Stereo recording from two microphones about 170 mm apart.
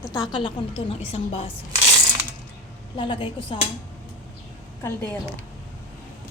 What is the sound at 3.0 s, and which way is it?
Speech, 30° left (ahead or behind).